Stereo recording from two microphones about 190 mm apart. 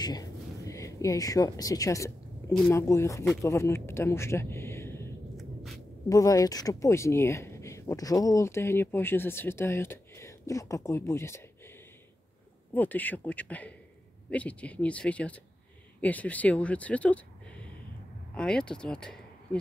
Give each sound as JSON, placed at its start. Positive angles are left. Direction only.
{"t": 0.0, "sound": "a sound", "side_deg": 20}
{"t": 2.7, "sound": "speech", "side_deg": 15}
{"t": 5.4, "sound": "hum", "side_deg": 0}
{"t": 6.0, "sound": "speech", "side_deg": 15}
{"t": 12.7, "sound": "speech", "side_deg": 10}